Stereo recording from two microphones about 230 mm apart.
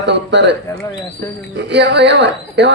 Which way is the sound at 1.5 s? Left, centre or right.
Right.